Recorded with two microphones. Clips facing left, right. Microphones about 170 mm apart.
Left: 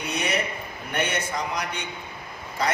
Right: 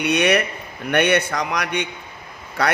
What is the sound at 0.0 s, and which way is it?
A man's voice, 75° right (ahead or behind).